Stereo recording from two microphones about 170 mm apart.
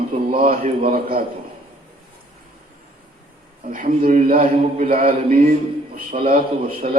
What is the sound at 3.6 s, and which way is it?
A man's voice, 55° right (ahead or behind).